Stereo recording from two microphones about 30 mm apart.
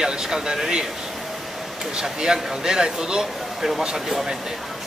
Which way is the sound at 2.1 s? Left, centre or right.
Right.